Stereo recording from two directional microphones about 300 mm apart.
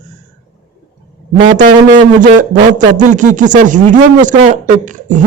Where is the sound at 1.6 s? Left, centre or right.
Right.